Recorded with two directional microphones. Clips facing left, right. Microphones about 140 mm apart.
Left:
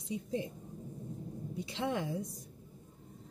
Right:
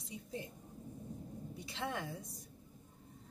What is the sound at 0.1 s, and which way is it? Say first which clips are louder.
Speech: left 9 dB; 20° left (ahead or behind).